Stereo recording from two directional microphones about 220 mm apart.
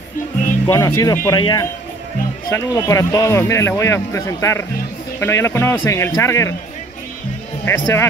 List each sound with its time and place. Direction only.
0.7 s speech: 15° left (ahead or behind)
7.6 s speech: 10° left (ahead or behind)